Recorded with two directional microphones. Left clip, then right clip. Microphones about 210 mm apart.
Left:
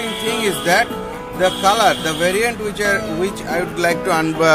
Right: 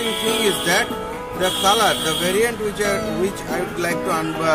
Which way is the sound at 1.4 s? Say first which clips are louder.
Left 3 dB; 30° left (ahead or behind).